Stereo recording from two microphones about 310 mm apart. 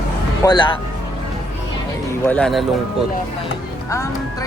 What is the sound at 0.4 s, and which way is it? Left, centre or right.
Speech, centre.